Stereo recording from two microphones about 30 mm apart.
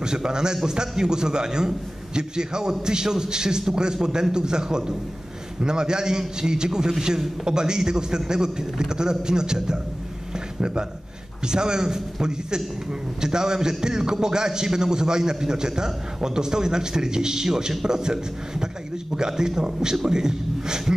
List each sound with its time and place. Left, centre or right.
0.0 s a man's voice: right
10.3 s a sound: right
11.4 s a man's voice: right